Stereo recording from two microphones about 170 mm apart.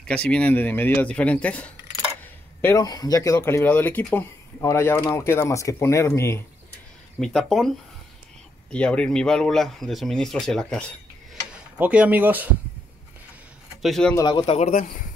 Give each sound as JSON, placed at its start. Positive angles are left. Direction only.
{"t": 0.1, "sound": "speech", "side_deg": 5}
{"t": 2.6, "sound": "speech", "side_deg": 20}
{"t": 7.2, "sound": "speech", "side_deg": 0}
{"t": 8.7, "sound": "speech", "side_deg": 5}
{"t": 11.5, "sound": "speech", "side_deg": -5}
{"t": 13.8, "sound": "speech", "side_deg": 0}
{"t": 14.1, "sound": "speech", "side_deg": 25}
{"t": 14.4, "sound": "speech", "side_deg": 40}